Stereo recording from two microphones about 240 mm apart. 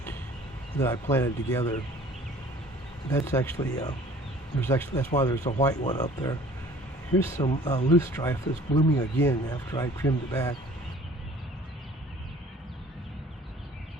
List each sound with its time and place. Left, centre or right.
1.1 s speech: centre
3.1 s speech: centre
7.3 s speech: centre